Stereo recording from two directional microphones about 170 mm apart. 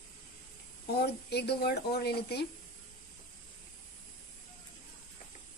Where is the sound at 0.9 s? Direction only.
75° left (ahead or behind).